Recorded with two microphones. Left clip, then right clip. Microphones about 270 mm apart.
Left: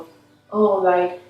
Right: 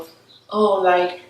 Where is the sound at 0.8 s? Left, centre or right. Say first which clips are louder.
Right 1 dB; centre.